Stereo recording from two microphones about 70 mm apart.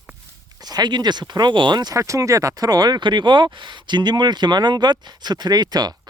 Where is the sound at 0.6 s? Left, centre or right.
Right.